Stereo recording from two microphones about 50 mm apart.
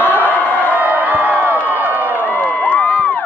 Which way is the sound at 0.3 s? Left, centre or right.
Left.